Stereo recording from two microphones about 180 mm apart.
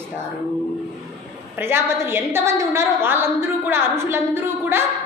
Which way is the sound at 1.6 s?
10° right (ahead or behind).